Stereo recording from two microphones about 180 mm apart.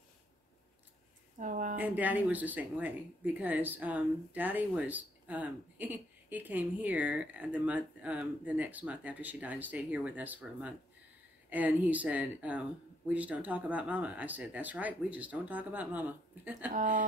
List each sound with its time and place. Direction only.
1.4 s speech: 45° right (ahead or behind)
1.8 s speech: 10° right (ahead or behind)
16.7 s a woman's voice: 45° right (ahead or behind)